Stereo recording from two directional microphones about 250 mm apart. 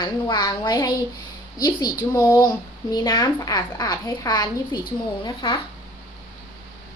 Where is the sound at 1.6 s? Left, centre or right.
Centre.